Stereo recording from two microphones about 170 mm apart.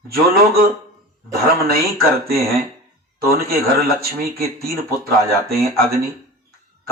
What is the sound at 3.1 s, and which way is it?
A man's voice, 65° right (ahead or behind).